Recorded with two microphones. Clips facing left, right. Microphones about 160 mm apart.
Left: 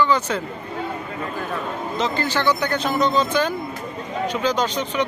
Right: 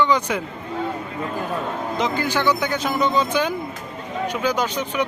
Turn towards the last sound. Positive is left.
turn(degrees=-10)  # may be behind; listen again after turning